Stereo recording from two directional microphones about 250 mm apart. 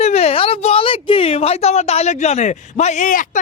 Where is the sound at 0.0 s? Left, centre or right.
Left.